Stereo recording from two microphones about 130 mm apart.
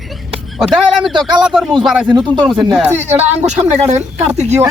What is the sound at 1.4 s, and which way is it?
Speech, 5° right (ahead or behind).